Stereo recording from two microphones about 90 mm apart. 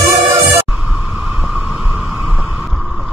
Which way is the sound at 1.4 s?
10° right (ahead or behind).